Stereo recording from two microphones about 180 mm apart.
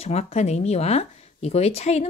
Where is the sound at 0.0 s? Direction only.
35° left (ahead or behind).